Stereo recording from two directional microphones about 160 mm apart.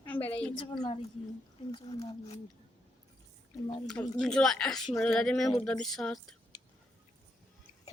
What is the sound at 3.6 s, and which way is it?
Speech, 30° left (ahead or behind).